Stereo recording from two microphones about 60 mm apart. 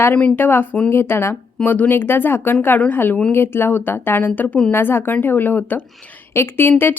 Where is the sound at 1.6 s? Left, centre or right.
Left.